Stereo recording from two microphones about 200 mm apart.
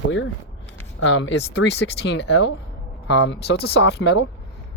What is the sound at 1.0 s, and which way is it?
Speech, 65° left (ahead or behind).